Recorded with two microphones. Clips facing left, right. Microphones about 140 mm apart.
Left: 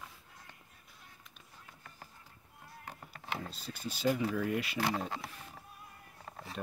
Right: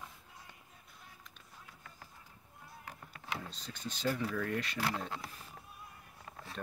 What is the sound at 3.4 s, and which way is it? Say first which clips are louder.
Speech: left 2 dB; 5° left (ahead or behind).